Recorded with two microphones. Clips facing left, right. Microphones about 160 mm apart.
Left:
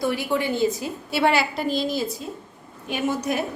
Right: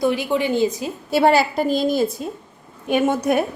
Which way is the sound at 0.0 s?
20° right (ahead or behind).